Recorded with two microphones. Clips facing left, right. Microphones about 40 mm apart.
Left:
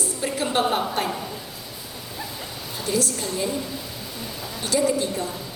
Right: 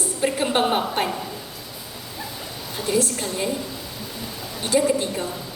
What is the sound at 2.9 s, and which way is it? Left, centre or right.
Speech, right.